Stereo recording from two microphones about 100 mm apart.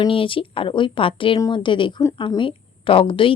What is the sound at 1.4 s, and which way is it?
A woman's voice, 45° left (ahead or behind).